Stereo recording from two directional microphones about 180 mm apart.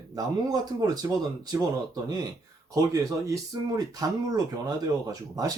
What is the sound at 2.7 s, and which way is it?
Speech, 20° right (ahead or behind).